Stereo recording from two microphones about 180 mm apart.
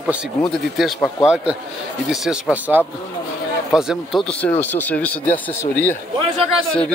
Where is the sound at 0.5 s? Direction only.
Centre (ahead or behind).